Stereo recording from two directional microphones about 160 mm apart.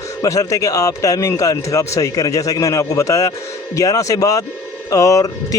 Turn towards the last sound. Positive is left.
turn(degrees=20)  # may be behind; listen again after turning